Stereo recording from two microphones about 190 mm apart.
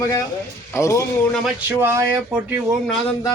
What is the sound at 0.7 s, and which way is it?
Speech, 15° left (ahead or behind).